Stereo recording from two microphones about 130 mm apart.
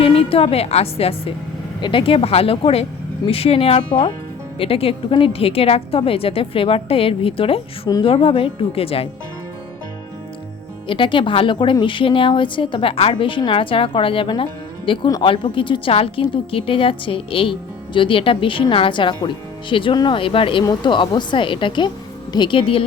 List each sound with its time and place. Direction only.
0.0 s a woman's voice: 45° left (ahead or behind)
10.8 s a woman's voice: 40° left (ahead or behind)